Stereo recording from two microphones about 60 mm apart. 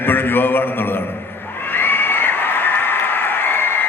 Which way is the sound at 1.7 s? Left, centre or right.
Left.